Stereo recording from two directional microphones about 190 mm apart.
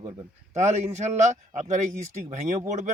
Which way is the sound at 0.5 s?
40° right (ahead or behind).